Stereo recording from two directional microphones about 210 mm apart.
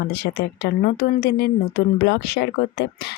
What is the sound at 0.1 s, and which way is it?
Speech, 50° left (ahead or behind).